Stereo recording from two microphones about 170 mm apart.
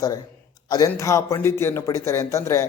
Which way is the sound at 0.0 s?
20° left (ahead or behind).